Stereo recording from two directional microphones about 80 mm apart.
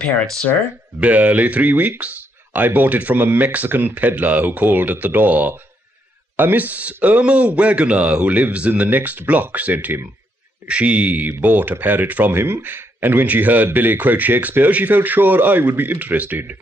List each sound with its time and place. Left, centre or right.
1.0 s speech: right